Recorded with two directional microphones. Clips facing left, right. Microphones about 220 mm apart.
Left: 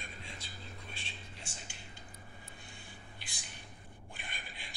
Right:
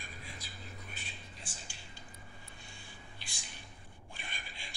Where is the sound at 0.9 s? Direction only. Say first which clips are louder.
Left 1 dB; 25° left (ahead or behind).